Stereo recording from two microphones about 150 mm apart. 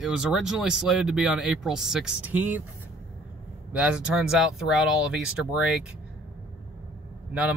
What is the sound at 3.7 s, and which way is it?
Speech, 5° right (ahead or behind).